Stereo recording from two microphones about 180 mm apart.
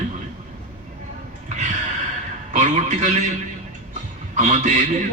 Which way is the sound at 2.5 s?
40° right (ahead or behind).